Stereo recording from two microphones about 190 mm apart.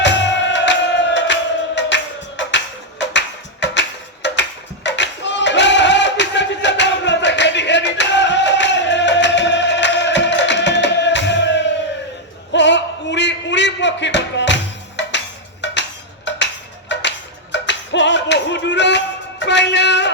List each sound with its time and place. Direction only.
0.0 s music: 70° left (ahead or behind)
3.1 s a sound: 70° left (ahead or behind)
15.6 s music: 70° left (ahead or behind)
16.9 s music: 70° left (ahead or behind)